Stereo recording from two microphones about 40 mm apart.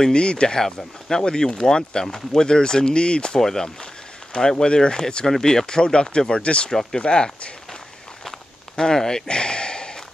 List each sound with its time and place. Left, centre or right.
0.1 s speech: left
3.3 s speech: centre; by 6.7 s left
6.7 s speech: centre
7.0 s speech: left
8.3 s walk: centre